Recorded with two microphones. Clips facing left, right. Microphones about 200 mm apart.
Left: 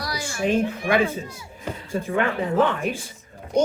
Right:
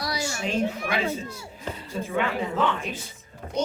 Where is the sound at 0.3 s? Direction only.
55° left (ahead or behind).